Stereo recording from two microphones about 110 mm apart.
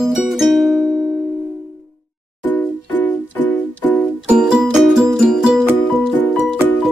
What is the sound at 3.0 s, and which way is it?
Music, 15° left (ahead or behind).